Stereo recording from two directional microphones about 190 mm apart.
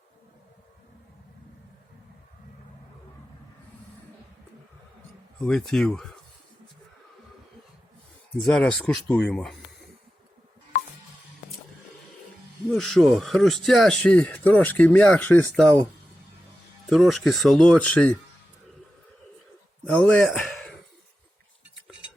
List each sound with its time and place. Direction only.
5.4 s speech: centre (ahead or behind)
8.4 s speech: 5° left (ahead or behind)
12.7 s speech: centre (ahead or behind)
16.9 s speech: centre (ahead or behind)
19.8 s a sound: 5° left (ahead or behind)